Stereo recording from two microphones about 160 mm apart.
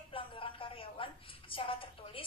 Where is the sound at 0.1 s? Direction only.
35° left (ahead or behind).